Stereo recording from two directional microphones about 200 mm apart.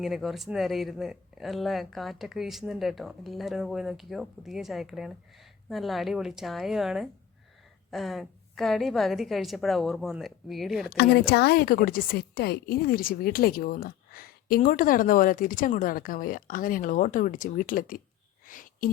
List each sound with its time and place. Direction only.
0.0 s speech: centre (ahead or behind)
10.9 s speech: 55° left (ahead or behind)
18.4 s a sound: 45° left (ahead or behind)